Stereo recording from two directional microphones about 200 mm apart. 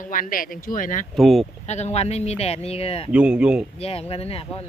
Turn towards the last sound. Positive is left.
turn(degrees=30)  # may be behind; listen again after turning